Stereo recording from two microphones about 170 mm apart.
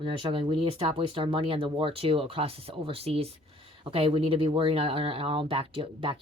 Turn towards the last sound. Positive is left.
turn(degrees=-30)  # may be behind; listen again after turning